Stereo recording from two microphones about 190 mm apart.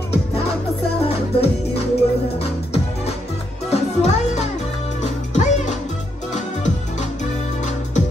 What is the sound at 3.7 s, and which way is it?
Music, 35° left (ahead or behind).